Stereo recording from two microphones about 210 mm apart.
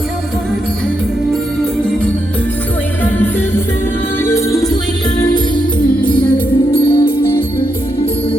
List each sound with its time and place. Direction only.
4.2 s music: 10° left (ahead or behind)
6.7 s music: 25° left (ahead or behind)